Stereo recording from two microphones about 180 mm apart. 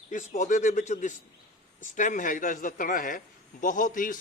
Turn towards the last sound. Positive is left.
turn(degrees=50)  # may be behind; listen again after turning